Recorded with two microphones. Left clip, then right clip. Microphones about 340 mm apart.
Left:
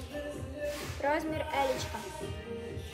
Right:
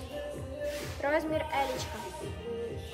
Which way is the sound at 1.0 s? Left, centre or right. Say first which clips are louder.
Right 2 dB; centre.